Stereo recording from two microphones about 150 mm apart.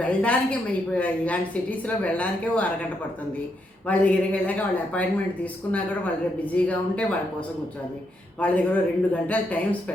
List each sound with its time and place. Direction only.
0.0 s speech: 10° left (ahead or behind)
3.8 s speech: 10° left (ahead or behind)